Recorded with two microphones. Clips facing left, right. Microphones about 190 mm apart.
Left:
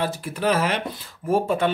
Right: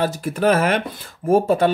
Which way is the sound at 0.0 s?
45° right (ahead or behind).